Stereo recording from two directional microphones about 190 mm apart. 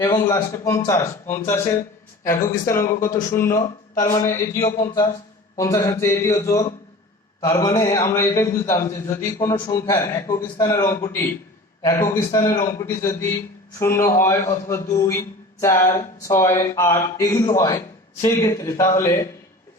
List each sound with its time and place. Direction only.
0.0 s a man's voice: 20° left (ahead or behind)